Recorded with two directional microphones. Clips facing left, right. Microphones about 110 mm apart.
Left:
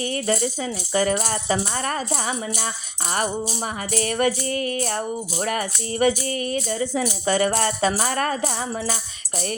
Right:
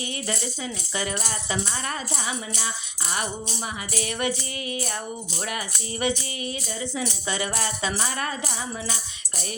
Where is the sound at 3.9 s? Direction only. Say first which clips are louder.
Left 6 dB; 45° left (ahead or behind).